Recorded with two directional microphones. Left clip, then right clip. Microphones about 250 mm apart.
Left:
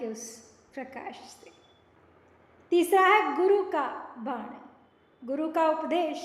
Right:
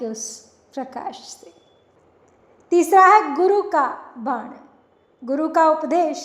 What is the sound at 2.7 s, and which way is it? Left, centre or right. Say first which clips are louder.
A woman's voice: right 9 dB; right.